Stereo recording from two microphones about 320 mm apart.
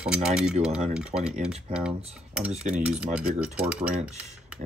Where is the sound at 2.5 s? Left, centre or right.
Right.